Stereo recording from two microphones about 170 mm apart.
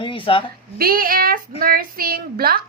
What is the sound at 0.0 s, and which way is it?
Speech, 30° left (ahead or behind).